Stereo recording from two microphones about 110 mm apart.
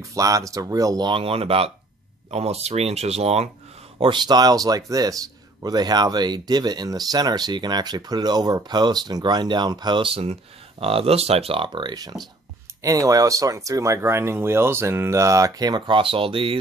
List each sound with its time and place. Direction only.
0.0 s speech: 30° right (ahead or behind)
1.1 s speech: 60° right (ahead or behind)
2.3 s speech: 70° right (ahead or behind)
4.0 s speech: 45° right (ahead or behind)